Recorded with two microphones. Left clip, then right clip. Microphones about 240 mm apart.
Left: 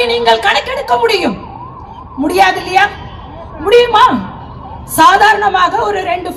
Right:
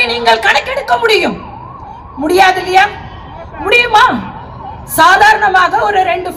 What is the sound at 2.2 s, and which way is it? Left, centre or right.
A woman's voice, right.